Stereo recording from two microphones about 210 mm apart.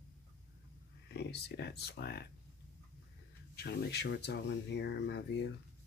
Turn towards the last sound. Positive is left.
turn(degrees=55)  # may be behind; listen again after turning